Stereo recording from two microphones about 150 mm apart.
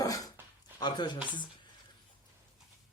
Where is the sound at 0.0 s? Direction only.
25° left (ahead or behind).